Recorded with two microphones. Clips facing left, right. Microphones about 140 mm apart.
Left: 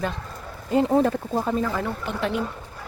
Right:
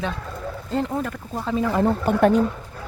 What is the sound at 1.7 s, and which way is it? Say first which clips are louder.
Speech: right 7 dB; 30° right (ahead or behind).